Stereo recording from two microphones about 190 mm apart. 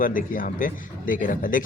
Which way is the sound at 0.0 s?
45° left (ahead or behind).